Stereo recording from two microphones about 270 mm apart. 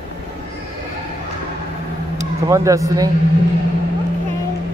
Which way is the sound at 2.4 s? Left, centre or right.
Centre.